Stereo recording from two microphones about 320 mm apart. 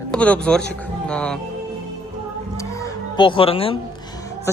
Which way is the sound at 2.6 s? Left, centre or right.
Centre.